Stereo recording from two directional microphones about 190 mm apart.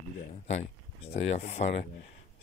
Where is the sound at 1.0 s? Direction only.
35° left (ahead or behind).